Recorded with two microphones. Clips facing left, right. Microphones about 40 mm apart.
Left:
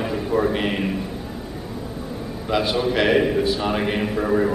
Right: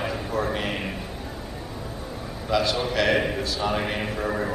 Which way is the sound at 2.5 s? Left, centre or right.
Left.